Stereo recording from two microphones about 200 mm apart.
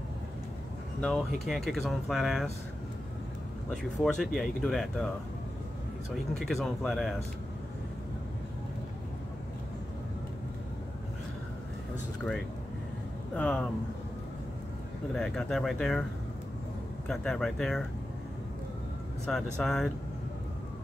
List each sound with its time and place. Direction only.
1.0 s speech: centre (ahead or behind)
3.7 s speech: centre (ahead or behind)
6.3 s speech: centre (ahead or behind)
13.3 s speech: 5° left (ahead or behind)
15.1 s speech: centre (ahead or behind)
17.1 s speech: centre (ahead or behind)
19.3 s speech: 5° left (ahead or behind)